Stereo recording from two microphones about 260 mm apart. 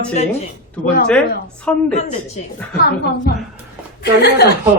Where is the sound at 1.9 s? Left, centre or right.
Left.